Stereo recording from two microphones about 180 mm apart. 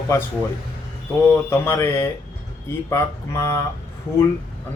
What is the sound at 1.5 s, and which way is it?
Speech, 15° left (ahead or behind).